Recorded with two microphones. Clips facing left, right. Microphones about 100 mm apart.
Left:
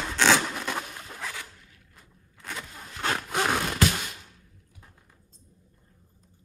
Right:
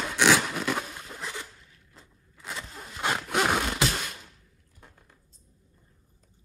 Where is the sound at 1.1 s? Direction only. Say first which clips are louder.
Even; 20° right (ahead or behind).